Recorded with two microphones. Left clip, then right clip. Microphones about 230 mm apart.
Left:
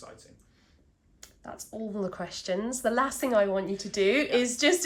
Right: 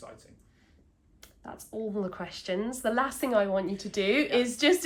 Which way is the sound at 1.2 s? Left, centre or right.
Left.